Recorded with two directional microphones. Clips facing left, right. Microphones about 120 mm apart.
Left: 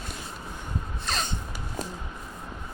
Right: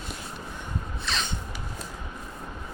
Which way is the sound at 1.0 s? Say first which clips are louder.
Left 1 dB; 45° left (ahead or behind).